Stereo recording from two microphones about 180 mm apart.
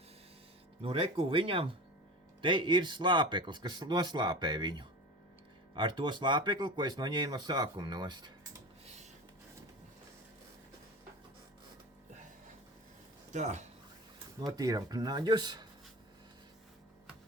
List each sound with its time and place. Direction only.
0.8 s speech: 30° right (ahead or behind)
13.3 s speech: 40° right (ahead or behind)
14.4 s speech: 20° right (ahead or behind)